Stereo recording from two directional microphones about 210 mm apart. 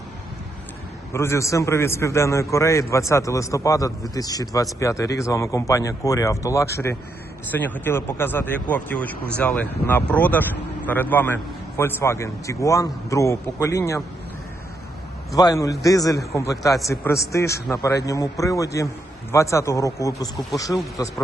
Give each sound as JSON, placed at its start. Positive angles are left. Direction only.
{"t": 1.1, "sound": "speech", "side_deg": 10}
{"t": 15.4, "sound": "speech", "side_deg": 15}